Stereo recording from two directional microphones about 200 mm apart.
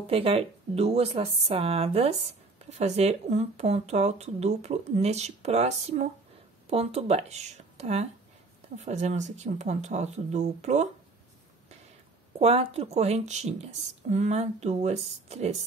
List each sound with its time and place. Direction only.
0.0 s speech: 30° right (ahead or behind)
12.4 s speech: 30° right (ahead or behind)